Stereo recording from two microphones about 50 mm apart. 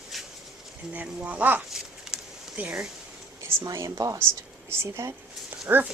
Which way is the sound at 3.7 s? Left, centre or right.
Right.